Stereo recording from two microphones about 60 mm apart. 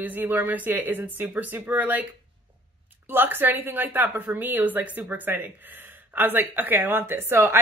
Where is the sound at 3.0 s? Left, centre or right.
Right.